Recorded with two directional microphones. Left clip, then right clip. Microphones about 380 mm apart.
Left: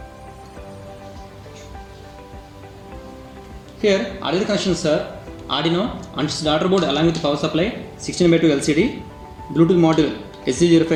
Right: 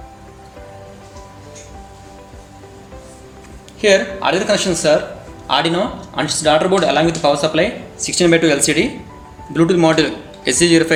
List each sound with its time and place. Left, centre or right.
3.8 s speech: right